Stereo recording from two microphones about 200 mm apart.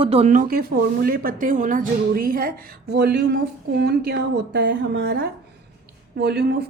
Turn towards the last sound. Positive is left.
turn(degrees=-55)  # may be behind; listen again after turning